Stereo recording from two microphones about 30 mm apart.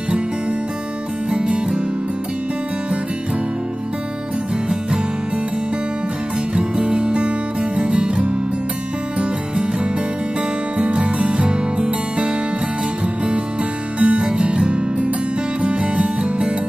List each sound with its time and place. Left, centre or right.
1.3 s music: right
6.8 s music: right
10.8 s music: right
13.9 s music: right
15.6 s music: right